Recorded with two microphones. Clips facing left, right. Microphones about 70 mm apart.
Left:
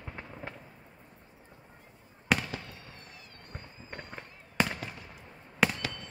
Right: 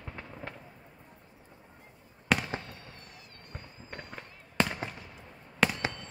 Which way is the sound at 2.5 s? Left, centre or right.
Right.